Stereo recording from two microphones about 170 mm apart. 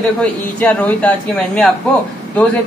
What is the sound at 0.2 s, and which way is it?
Speech, 10° left (ahead or behind).